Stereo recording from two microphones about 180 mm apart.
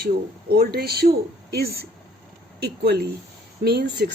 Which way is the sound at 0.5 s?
60° right (ahead or behind).